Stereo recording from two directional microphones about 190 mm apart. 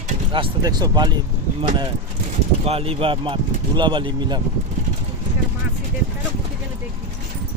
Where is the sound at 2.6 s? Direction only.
30° right (ahead or behind).